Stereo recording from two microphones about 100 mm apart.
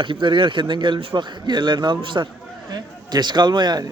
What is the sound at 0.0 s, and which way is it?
A man's voice, 55° right (ahead or behind).